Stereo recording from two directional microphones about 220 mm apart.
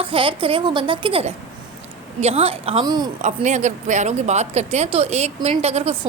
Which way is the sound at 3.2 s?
30° right (ahead or behind).